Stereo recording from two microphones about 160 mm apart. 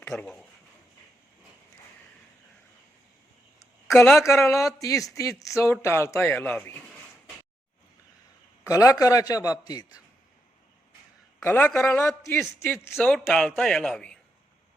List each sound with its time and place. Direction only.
0.1 s a man's voice: 5° left (ahead or behind)
3.8 s a man's voice: 10° left (ahead or behind)
8.6 s speech: 20° left (ahead or behind)
11.3 s a man's voice: 10° left (ahead or behind)